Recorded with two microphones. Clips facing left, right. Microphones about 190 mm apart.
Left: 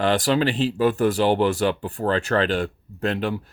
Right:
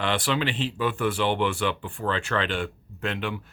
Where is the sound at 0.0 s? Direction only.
40° left (ahead or behind).